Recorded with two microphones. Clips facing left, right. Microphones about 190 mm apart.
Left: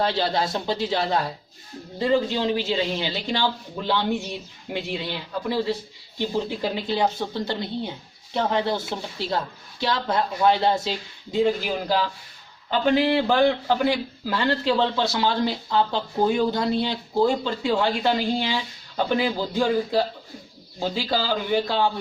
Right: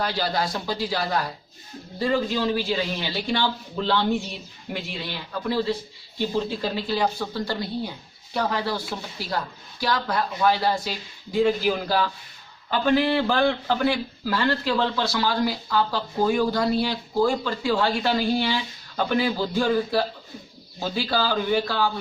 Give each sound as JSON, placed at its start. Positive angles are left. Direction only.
{"t": 0.0, "sound": "a man's voice", "side_deg": 25}
{"t": 5.5, "sound": "a man's voice", "side_deg": 15}